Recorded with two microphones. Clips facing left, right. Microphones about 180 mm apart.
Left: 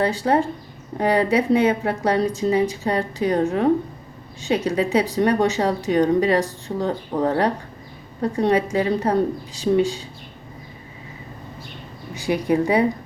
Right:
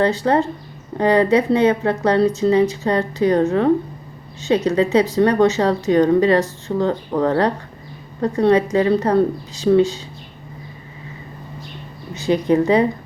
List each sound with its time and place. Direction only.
0.0 s a woman's voice: 10° left (ahead or behind)
12.1 s a woman's voice: 10° left (ahead or behind)